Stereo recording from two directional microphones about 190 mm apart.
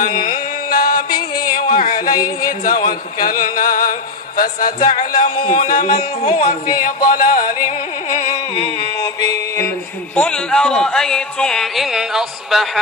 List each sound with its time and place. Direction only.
0.0 s music: 45° left (ahead or behind)
1.4 s a sound: 45° left (ahead or behind)
2.4 s a man's voice: 45° left (ahead or behind)
6.2 s music: 30° left (ahead or behind)
6.7 s a man's voice: 45° left (ahead or behind)
9.0 s mantra: 20° left (ahead or behind)
10.2 s speech: 5° left (ahead or behind)